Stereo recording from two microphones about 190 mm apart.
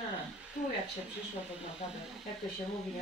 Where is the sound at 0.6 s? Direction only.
40° left (ahead or behind).